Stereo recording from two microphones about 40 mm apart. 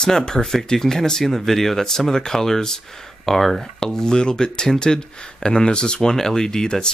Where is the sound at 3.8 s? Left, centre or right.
Centre.